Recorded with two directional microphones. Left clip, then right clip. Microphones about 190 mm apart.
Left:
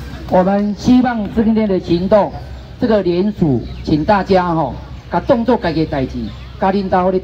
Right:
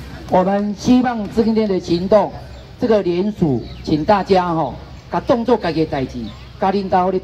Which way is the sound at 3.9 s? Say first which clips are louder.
Left 1 dB; centre (ahead or behind).